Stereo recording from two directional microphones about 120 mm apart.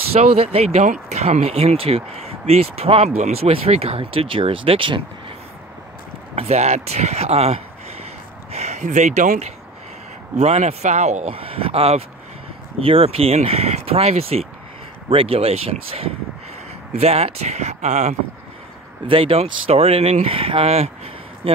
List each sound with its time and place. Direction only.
0.1 s speech: 55° right (ahead or behind)
6.3 s speech: 65° right (ahead or behind); by 9.5 s 80° right
10.3 s speech: 65° right (ahead or behind)
11.3 s speech: 50° right (ahead or behind); by 18.1 s 65° right (ahead or behind)
19.0 s speech: 50° right (ahead or behind)